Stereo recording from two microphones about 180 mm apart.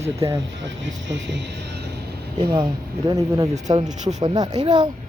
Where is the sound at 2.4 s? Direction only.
20° right (ahead or behind).